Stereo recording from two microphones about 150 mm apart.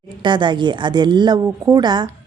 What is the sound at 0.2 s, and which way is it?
A woman's voice, 30° right (ahead or behind).